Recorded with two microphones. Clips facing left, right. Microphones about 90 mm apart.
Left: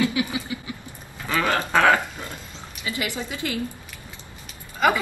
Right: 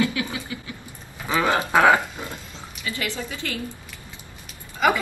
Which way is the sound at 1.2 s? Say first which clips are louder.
Right 2 dB; 15° right (ahead or behind).